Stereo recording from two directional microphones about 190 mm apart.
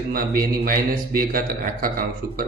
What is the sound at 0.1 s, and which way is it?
A man's voice, 50° right (ahead or behind).